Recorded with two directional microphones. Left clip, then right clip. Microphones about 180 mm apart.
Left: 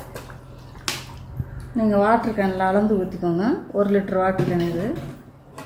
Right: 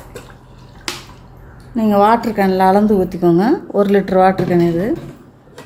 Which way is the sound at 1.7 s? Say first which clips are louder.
Right 6 dB; 50° right (ahead or behind).